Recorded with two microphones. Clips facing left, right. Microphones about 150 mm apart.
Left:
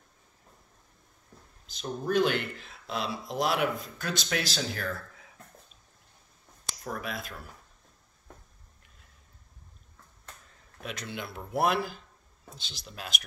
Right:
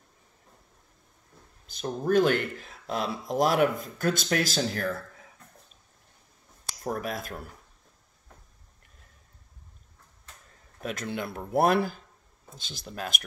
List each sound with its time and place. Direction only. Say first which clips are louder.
1.7 s speech: right 4 dB; 50° right (ahead or behind)
6.7 s speech: right 4 dB; 45° right (ahead or behind)
10.8 s speech: right 5 dB; 45° right (ahead or behind)